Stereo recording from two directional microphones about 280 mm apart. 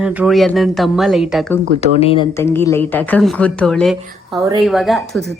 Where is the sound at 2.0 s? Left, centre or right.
Centre.